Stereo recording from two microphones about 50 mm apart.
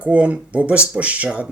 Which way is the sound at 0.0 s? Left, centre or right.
Right.